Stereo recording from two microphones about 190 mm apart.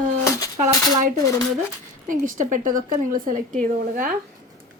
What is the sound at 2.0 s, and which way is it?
A woman's voice, 45° right (ahead or behind).